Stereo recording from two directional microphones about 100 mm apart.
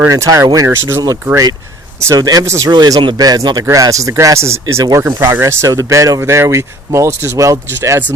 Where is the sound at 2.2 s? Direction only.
40° right (ahead or behind).